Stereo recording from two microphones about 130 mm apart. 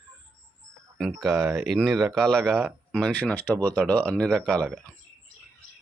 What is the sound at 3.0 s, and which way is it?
Speech, 10° left (ahead or behind).